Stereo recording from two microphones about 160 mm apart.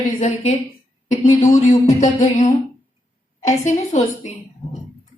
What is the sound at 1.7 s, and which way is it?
A woman's voice, 45° left (ahead or behind).